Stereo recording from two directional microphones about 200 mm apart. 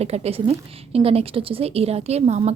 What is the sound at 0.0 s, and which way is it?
A woman's voice, 30° right (ahead or behind).